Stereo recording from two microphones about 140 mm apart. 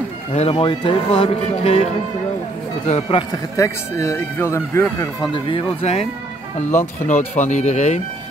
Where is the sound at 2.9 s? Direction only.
40° left (ahead or behind).